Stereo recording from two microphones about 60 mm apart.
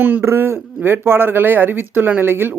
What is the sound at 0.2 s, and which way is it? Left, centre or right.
Speech, right.